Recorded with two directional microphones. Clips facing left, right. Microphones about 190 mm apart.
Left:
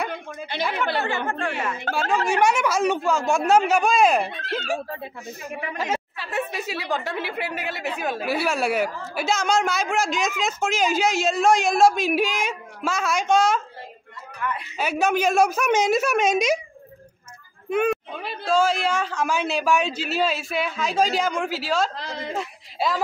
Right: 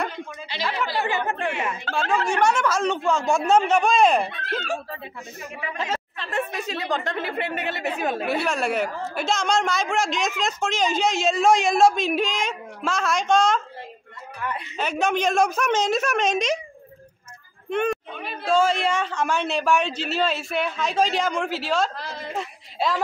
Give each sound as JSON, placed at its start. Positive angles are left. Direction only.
{"t": 1.0, "sound": "speech", "side_deg": -20}
{"t": 1.9, "sound": "speech", "side_deg": 50}
{"t": 2.2, "sound": "a woman's voice", "side_deg": 10}
{"t": 14.4, "sound": "a woman's voice", "side_deg": -35}
{"t": 14.8, "sound": "speech", "side_deg": 5}
{"t": 17.6, "sound": "a woman's voice", "side_deg": 5}
{"t": 21.9, "sound": "a woman's voice", "side_deg": 20}
{"t": 22.4, "sound": "a woman's voice", "side_deg": 5}